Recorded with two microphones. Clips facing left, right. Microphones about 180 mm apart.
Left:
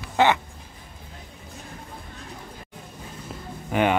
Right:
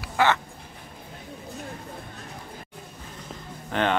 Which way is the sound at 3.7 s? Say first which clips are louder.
Left 3 dB; 10° left (ahead or behind).